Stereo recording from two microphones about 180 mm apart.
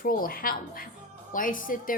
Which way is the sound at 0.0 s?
55° left (ahead or behind).